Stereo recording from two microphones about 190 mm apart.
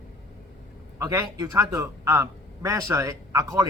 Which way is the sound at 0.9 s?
15° right (ahead or behind).